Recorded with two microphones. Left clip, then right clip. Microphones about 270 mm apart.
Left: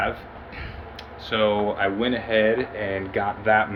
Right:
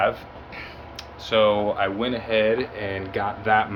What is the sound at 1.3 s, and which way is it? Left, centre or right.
Speech, centre.